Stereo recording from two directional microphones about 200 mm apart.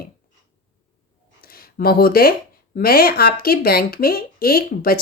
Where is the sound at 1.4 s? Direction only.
50° left (ahead or behind).